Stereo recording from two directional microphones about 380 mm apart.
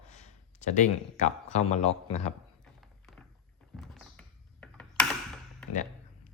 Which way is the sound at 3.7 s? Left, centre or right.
Centre.